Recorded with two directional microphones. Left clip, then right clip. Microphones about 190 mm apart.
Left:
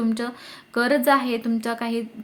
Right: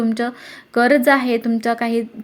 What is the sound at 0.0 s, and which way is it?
Speech, 15° right (ahead or behind).